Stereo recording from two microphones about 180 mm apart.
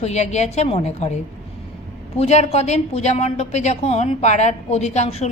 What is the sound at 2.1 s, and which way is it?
A woman's voice, 35° left (ahead or behind).